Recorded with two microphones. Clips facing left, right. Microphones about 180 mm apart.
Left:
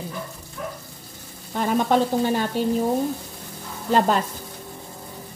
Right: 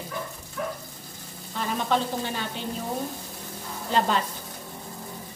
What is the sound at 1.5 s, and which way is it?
Speech, 50° left (ahead or behind).